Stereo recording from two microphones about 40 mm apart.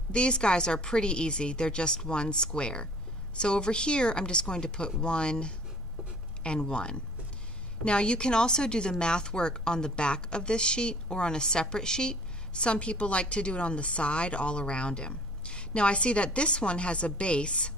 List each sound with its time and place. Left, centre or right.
0.1 s speech: left